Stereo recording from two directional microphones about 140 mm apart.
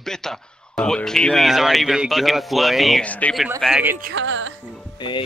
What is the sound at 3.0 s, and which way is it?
Speech, 10° left (ahead or behind).